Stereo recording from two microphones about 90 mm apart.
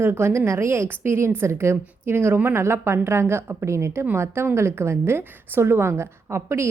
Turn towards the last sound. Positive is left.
turn(degrees=-30)  # may be behind; listen again after turning